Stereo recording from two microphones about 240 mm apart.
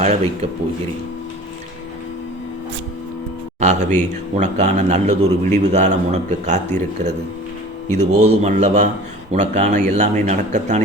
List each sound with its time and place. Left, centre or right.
0.0 s speech: right
3.6 s speech: right